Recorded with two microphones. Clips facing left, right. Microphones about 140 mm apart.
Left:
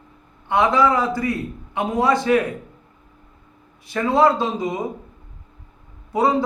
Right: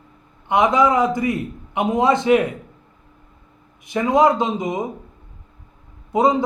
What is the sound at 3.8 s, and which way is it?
A man's voice, 15° right (ahead or behind).